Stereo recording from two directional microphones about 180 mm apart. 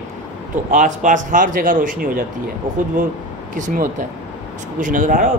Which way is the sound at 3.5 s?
50° right (ahead or behind).